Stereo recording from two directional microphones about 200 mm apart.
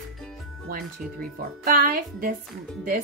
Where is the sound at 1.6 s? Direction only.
45° right (ahead or behind).